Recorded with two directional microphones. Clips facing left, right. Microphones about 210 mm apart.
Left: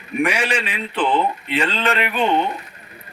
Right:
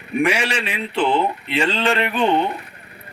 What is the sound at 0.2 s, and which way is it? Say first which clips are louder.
Speech: right 1 dB; 25° right (ahead or behind).